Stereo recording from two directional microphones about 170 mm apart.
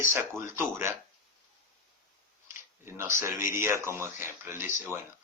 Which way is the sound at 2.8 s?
15° right (ahead or behind).